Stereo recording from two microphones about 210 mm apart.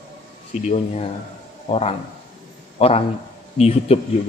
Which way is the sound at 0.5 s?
35° left (ahead or behind).